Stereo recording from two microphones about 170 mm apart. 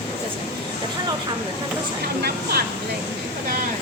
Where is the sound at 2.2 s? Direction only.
65° right (ahead or behind).